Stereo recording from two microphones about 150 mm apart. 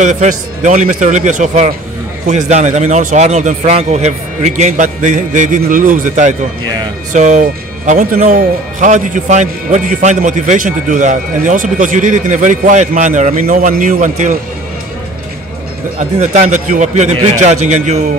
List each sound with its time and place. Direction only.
0.0 s a man's voice: 55° right (ahead or behind)
16.0 s a man's voice: 50° right (ahead or behind)